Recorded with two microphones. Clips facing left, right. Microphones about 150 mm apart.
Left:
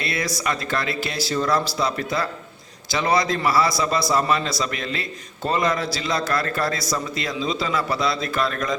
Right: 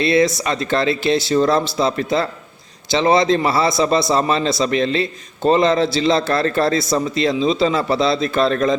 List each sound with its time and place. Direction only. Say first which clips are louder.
0.0 s a man's voice: right 10 dB; 25° right (ahead or behind)